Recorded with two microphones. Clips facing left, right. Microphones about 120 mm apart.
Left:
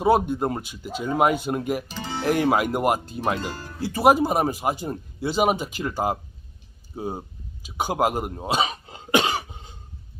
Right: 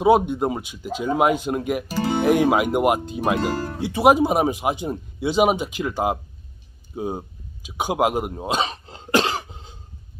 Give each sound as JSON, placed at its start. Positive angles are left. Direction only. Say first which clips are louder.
{"t": 0.0, "sound": "speech", "louder": "right 3 dB", "side_deg": 0}
{"t": 3.3, "sound": "speech", "louder": "right 8 dB", "side_deg": -60}
{"t": 3.8, "sound": "speech", "louder": "right 2 dB", "side_deg": 0}
{"t": 7.8, "sound": "cough", "louder": "right 2 dB", "side_deg": 0}